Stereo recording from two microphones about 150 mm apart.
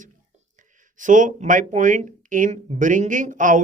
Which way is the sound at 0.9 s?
60° right (ahead or behind).